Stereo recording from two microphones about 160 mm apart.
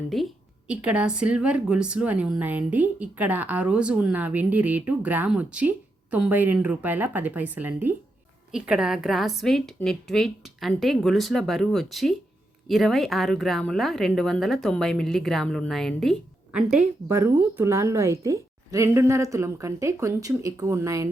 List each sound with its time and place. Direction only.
0.7 s a woman's voice: 10° right (ahead or behind)